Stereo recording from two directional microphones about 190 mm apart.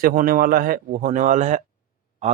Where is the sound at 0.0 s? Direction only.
45° right (ahead or behind).